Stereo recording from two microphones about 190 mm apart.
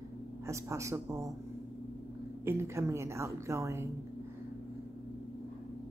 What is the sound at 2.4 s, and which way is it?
A woman's voice, 15° right (ahead or behind).